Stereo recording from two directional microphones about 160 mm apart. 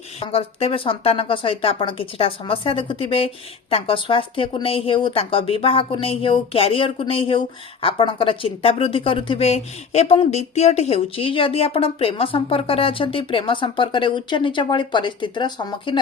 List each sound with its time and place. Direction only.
0.2 s speech: 40° left (ahead or behind)